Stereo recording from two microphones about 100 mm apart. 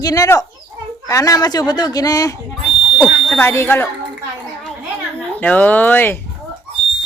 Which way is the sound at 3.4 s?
25° left (ahead or behind).